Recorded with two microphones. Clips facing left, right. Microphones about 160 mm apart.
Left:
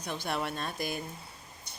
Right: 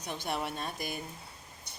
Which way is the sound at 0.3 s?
15° right (ahead or behind).